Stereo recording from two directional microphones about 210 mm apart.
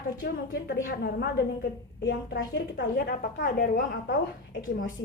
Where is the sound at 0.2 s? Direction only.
50° left (ahead or behind).